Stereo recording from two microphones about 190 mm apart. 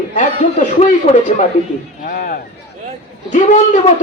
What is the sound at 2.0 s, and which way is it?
A man's voice, 50° left (ahead or behind).